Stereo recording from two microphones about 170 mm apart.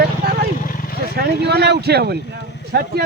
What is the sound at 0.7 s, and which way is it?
Vehicle, 55° left (ahead or behind).